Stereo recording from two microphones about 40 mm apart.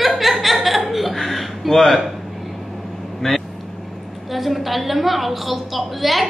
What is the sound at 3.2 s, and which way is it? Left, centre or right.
Speech, centre.